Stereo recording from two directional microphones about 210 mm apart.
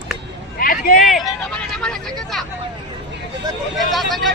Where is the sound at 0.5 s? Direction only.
45° left (ahead or behind).